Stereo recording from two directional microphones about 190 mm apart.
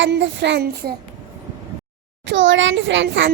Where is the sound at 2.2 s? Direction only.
80° right.